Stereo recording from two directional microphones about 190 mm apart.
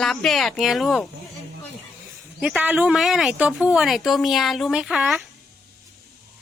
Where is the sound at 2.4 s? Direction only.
5° right (ahead or behind).